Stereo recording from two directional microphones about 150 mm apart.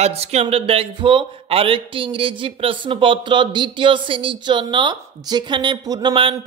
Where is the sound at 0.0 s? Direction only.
45° right (ahead or behind).